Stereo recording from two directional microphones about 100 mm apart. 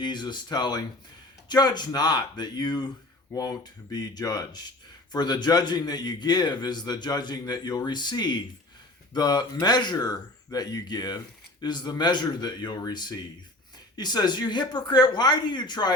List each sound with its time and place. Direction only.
0.0 s a man's voice: 50° left (ahead or behind)